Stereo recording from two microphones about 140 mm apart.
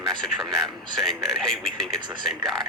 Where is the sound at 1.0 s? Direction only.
5° left (ahead or behind).